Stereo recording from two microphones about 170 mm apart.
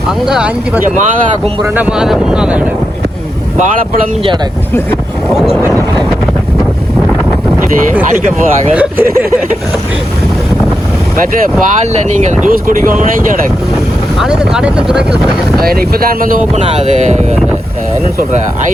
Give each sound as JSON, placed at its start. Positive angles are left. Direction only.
{"t": 0.3, "sound": "speech", "side_deg": -5}
{"t": 5.3, "sound": "vehicle", "side_deg": 0}
{"t": 8.7, "sound": "speech", "side_deg": -10}
{"t": 12.0, "sound": "speech", "side_deg": -45}
{"t": 12.5, "sound": "speech", "side_deg": -55}
{"t": 14.2, "sound": "speech", "side_deg": -5}
{"t": 15.6, "sound": "speech", "side_deg": -60}
{"t": 16.6, "sound": "speech", "side_deg": -40}